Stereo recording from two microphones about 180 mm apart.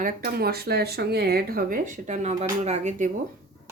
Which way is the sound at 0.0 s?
60° right (ahead or behind).